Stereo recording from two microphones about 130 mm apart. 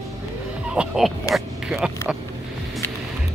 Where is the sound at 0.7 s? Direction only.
5° right (ahead or behind).